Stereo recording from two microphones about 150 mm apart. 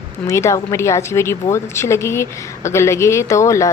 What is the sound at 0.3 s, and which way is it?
A woman's voice, 20° left (ahead or behind).